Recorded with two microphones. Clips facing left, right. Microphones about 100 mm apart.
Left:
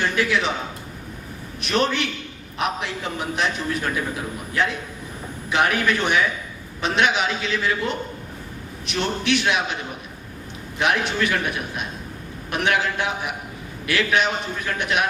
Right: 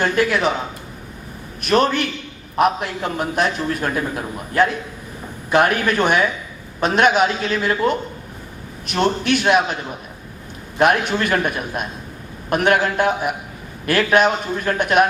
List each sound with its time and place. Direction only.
0.0 s a man's voice: 45° right (ahead or behind)
1.6 s a man's voice: 45° right (ahead or behind)
10.8 s a man's voice: 45° right (ahead or behind)